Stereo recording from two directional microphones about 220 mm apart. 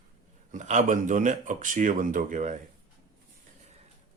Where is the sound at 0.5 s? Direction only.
35° right (ahead or behind).